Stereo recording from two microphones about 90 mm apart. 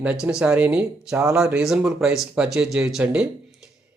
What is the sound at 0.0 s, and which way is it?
A man's voice, 10° right (ahead or behind).